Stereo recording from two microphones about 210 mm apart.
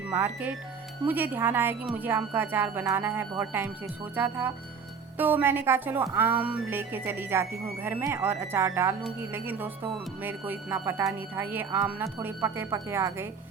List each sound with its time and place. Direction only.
0.1 s a woman's voice: 10° right (ahead or behind)